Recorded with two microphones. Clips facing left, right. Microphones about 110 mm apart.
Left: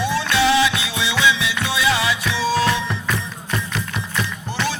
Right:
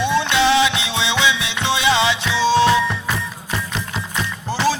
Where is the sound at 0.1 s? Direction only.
20° right (ahead or behind).